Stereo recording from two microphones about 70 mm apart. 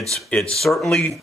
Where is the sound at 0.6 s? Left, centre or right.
Centre.